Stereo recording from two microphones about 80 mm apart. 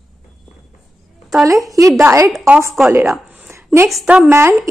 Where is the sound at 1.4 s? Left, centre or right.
Right.